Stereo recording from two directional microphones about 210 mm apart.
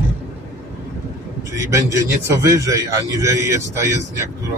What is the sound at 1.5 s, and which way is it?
A man's voice, 15° right (ahead or behind).